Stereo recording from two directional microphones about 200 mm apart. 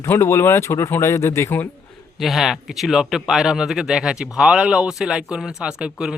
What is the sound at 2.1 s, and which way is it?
Speech, centre (ahead or behind).